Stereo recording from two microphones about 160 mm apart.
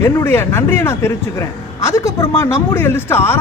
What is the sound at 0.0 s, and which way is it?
Speech, 15° left (ahead or behind).